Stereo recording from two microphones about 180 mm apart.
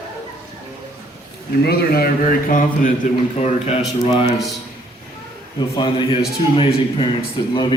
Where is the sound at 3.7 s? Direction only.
30° left (ahead or behind).